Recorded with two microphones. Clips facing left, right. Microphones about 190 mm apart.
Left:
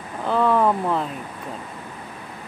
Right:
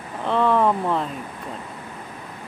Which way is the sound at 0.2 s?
Centre (ahead or behind).